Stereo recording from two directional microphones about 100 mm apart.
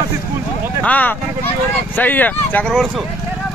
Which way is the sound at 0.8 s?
15° left (ahead or behind).